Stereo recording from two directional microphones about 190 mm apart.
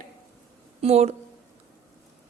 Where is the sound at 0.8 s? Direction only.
35° right (ahead or behind).